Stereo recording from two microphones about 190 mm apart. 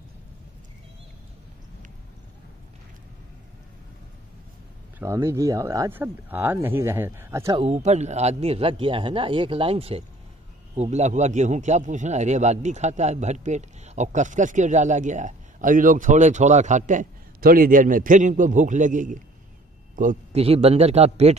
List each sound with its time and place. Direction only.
4.9 s speech: 15° right (ahead or behind)
7.5 s a man's voice: 35° right (ahead or behind)